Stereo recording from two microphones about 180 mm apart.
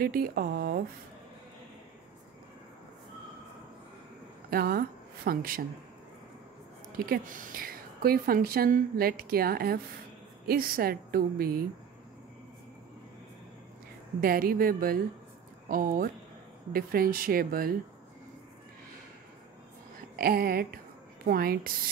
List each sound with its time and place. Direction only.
0.0 s speech: 55° right (ahead or behind)
4.5 s a woman's voice: 55° right (ahead or behind)
7.1 s a woman's voice: 45° right (ahead or behind)
14.2 s speech: 50° right (ahead or behind)
20.2 s speech: 55° right (ahead or behind)